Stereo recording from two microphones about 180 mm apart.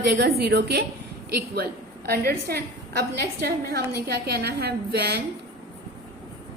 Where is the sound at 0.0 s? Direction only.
65° right (ahead or behind).